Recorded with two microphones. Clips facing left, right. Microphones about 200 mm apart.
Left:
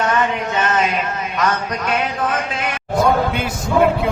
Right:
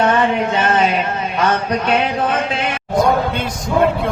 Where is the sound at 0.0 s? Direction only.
30° right (ahead or behind).